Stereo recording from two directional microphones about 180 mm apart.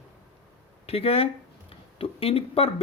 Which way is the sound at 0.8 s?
35° left (ahead or behind).